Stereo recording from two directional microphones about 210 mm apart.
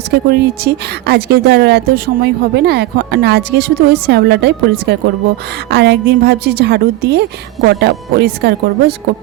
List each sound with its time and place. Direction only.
0.1 s speech: 50° right (ahead or behind)